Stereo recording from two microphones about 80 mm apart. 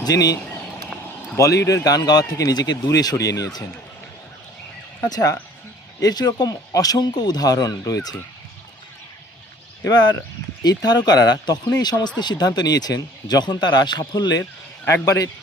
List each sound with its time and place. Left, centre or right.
0.0 s speech: left
1.4 s speech: left
4.9 s speech: left
9.8 s speech: left
15.0 s speech: left